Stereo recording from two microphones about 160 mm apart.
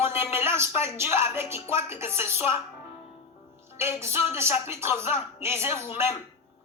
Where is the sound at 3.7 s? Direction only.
15° right (ahead or behind).